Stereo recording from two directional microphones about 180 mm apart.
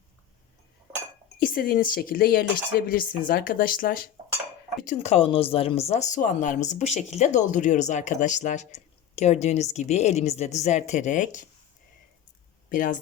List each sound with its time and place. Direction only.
1.4 s speech: 50° left (ahead or behind)
4.9 s speech: 35° left (ahead or behind)
12.7 s speech: 50° left (ahead or behind)